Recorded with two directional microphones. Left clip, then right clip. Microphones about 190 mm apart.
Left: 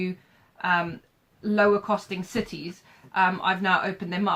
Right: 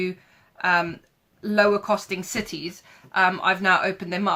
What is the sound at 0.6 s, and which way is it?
Speech, 45° right (ahead or behind).